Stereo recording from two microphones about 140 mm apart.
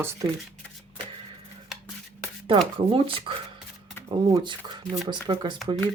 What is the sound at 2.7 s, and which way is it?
Speech, 40° right (ahead or behind).